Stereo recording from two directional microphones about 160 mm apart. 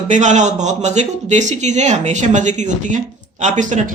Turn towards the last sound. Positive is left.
turn(degrees=-50)  # may be behind; listen again after turning